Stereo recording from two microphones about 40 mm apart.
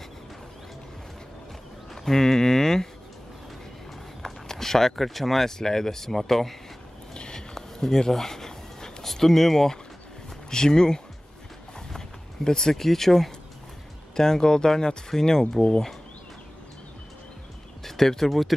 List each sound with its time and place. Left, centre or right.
2.0 s speech: centre
4.2 s speech: centre
7.2 s a sound: left
7.5 s a sound: centre
9.0 s speech: centre
10.5 s speech: centre
12.4 s speech: centre
17.8 s speech: centre